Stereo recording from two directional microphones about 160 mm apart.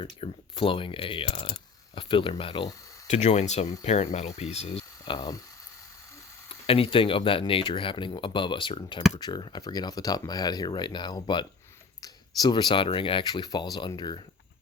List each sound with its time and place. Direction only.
0.0 s speech: 35° left (ahead or behind)
3.1 s speech: 45° left (ahead or behind)
5.1 s speech: 25° left (ahead or behind)
6.5 s speech: 35° left (ahead or behind)